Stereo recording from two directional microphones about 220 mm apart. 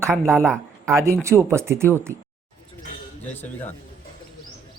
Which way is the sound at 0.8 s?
10° right (ahead or behind).